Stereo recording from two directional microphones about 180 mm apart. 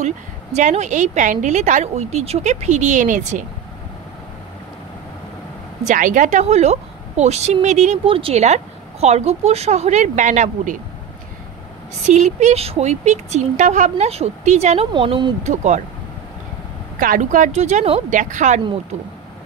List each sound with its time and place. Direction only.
0.0 s a woman's voice: 40° right (ahead or behind)
5.9 s a woman's voice: 45° right (ahead or behind)
12.1 s a woman's voice: 40° right (ahead or behind)
14.9 s speech: 25° right (ahead or behind)
15.4 s a woman's voice: 40° right (ahead or behind)
17.0 s speech: 50° right (ahead or behind)